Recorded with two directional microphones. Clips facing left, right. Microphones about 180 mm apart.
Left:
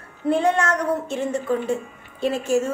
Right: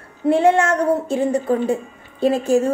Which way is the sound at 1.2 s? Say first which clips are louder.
Right 5 dB; 35° right (ahead or behind).